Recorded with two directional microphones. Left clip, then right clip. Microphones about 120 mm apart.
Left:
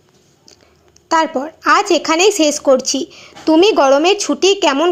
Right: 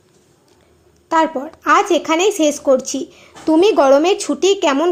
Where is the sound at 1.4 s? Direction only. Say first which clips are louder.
Left 1 dB; 15° left (ahead or behind).